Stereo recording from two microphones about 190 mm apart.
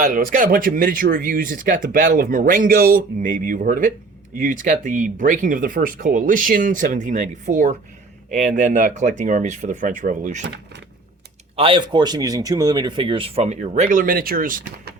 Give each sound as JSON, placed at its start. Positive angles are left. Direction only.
{"t": 0.0, "sound": "speech", "side_deg": -45}
{"t": 11.5, "sound": "speech", "side_deg": -25}